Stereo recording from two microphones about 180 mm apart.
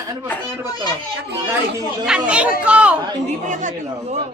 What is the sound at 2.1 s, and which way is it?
Speech, 5° right (ahead or behind).